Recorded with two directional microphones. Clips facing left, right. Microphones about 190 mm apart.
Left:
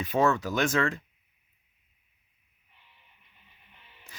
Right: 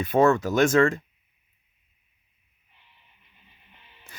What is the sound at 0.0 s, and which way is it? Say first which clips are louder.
Speech: right 5 dB; 50° right (ahead or behind).